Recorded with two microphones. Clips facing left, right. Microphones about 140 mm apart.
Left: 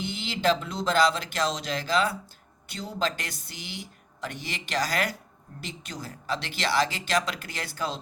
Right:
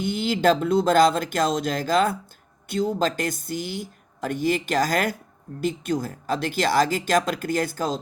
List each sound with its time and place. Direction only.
0.0 s speech: 50° right (ahead or behind)